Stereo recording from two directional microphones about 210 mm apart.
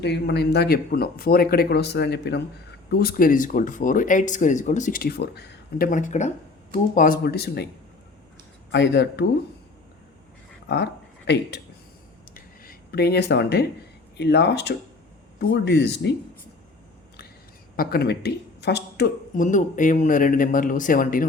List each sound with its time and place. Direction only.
0.0 s speech: 50° left (ahead or behind)
8.7 s speech: 55° left (ahead or behind)
12.3 s a sound: 45° left (ahead or behind)
14.2 s speech: 50° left (ahead or behind)
17.7 s speech: 50° left (ahead or behind)
19.5 s speech: 35° left (ahead or behind)